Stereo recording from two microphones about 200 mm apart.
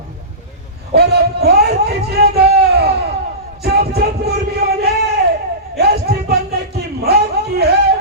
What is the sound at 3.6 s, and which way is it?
Music, 50° right (ahead or behind).